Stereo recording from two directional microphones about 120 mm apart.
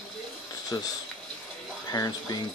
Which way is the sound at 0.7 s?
25° left (ahead or behind).